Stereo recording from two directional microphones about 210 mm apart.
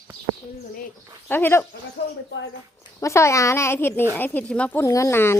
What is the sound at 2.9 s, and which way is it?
Speech, 15° left (ahead or behind).